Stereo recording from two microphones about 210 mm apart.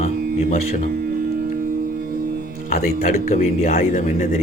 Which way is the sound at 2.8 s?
45° left (ahead or behind).